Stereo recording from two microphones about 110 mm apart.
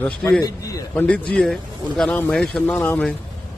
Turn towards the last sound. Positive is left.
turn(degrees=20)  # may be behind; listen again after turning